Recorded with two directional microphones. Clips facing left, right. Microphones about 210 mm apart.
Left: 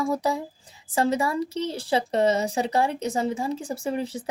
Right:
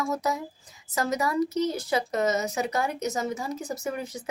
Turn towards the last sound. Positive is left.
turn(degrees=30)  # may be behind; listen again after turning